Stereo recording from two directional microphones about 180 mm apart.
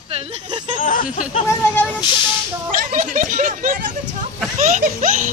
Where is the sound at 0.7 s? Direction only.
45° left (ahead or behind).